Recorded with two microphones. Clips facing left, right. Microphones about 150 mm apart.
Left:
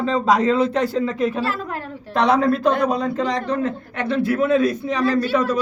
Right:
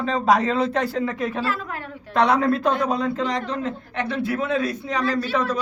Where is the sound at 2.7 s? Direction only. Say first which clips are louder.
Left 2 dB; 50° left (ahead or behind).